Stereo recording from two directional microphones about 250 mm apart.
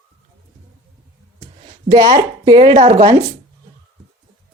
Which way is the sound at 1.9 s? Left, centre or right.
Centre.